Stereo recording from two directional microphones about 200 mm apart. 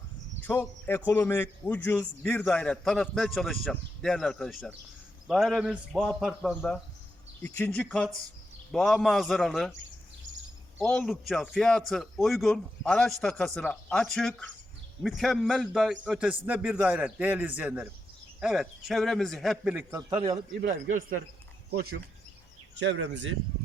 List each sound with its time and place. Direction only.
0.4 s a man's voice: 10° left (ahead or behind)
10.8 s a man's voice: 5° left (ahead or behind); by 20.4 s 20° right (ahead or behind)
21.7 s speech: 50° right (ahead or behind)
22.8 s speech: 65° right (ahead or behind)